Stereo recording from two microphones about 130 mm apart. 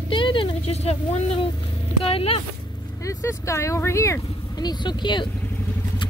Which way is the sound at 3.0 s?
25° left (ahead or behind).